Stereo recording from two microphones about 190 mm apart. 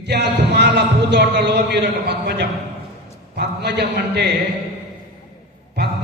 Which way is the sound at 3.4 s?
60° right (ahead or behind).